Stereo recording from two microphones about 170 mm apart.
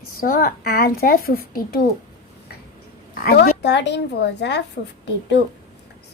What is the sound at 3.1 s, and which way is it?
Speech, 65° left (ahead or behind).